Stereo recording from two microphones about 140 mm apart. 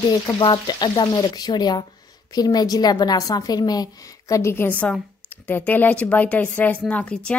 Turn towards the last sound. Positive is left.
turn(degrees=5)  # may be behind; listen again after turning